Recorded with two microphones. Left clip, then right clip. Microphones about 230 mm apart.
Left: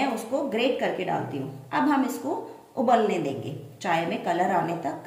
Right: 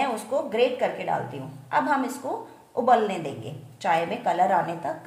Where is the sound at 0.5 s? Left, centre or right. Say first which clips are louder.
Right 2 dB; right.